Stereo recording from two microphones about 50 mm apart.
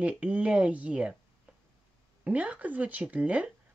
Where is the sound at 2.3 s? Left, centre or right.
Right.